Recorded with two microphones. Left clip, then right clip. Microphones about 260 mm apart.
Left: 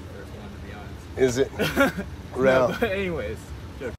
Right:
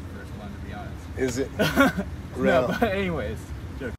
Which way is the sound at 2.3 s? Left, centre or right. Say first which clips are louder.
Left 2 dB; left.